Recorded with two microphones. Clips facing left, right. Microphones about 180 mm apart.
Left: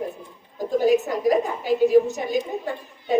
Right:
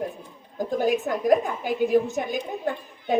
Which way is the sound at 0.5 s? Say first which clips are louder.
Left 4 dB; 50° right (ahead or behind).